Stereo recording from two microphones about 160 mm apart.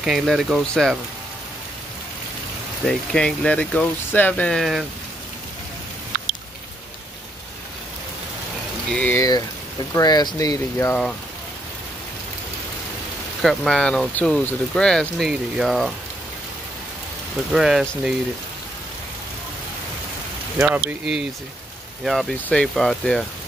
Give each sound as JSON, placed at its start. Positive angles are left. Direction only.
{"t": 0.0, "sound": "speech", "side_deg": -5}
{"t": 2.8, "sound": "speech", "side_deg": 5}
{"t": 8.9, "sound": "speech", "side_deg": 10}
{"t": 9.9, "sound": "speech", "side_deg": 25}
{"t": 10.9, "sound": "speech", "side_deg": 5}
{"t": 13.4, "sound": "speech", "side_deg": 5}
{"t": 17.5, "sound": "speech", "side_deg": -5}
{"t": 20.5, "sound": "speech", "side_deg": -10}